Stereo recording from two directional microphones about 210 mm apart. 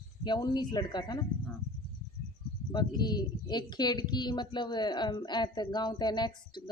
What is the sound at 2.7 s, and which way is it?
Speech, 20° left (ahead or behind).